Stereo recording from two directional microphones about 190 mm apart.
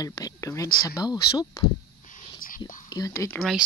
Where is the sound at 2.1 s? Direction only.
45° left (ahead or behind).